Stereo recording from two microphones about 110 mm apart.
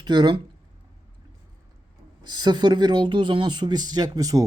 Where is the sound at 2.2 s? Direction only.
40° right (ahead or behind).